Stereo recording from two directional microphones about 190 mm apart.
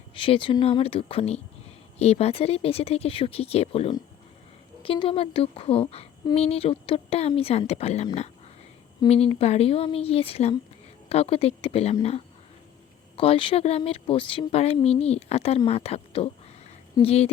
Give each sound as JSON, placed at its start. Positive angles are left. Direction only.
{"t": 0.1, "sound": "speech", "side_deg": 25}
{"t": 13.1, "sound": "speech", "side_deg": 30}